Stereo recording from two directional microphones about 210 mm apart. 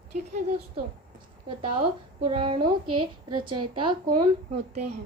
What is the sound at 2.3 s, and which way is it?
A woman's voice, 25° right (ahead or behind).